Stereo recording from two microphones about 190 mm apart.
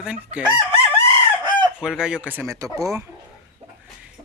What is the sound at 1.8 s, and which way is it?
Speech, 5° right (ahead or behind).